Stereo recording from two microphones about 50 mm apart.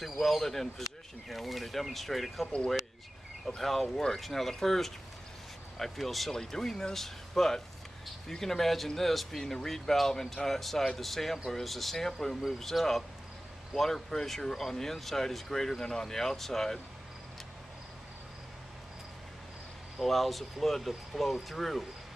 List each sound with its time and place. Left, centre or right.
0.0 s speech: centre
2.4 s speech: left
3.4 s speech: centre
20.0 s speech: centre